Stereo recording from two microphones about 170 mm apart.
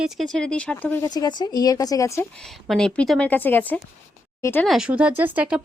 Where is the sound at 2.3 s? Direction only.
Centre (ahead or behind).